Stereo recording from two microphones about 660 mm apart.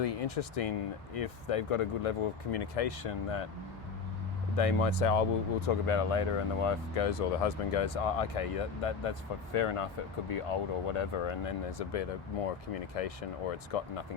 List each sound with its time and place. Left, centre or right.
0.0 s speech: left
4.5 s speech: left